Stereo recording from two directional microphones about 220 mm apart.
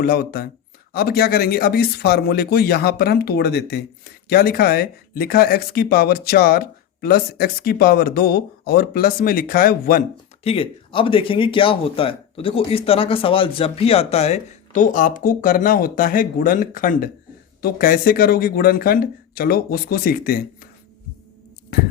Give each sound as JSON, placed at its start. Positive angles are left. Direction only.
{"t": 0.0, "sound": "speech", "side_deg": 45}
{"t": 10.4, "sound": "speech", "side_deg": 25}